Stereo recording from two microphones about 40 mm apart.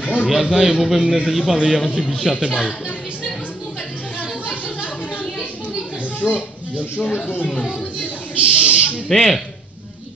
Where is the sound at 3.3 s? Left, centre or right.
Left.